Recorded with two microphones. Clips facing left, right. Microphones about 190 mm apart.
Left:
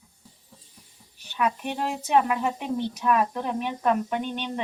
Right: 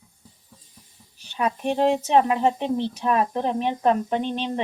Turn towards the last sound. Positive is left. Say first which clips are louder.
# right 4 dB
turn(degrees=-30)  # may be behind; listen again after turning